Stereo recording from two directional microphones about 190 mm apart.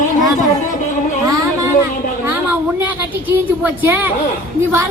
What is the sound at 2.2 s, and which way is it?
A woman's voice, 10° right (ahead or behind).